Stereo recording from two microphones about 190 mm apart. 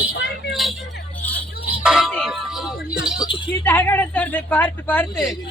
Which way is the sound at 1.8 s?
5° right (ahead or behind).